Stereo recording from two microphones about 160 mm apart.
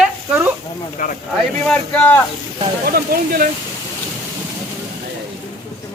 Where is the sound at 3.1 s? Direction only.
75° right (ahead or behind).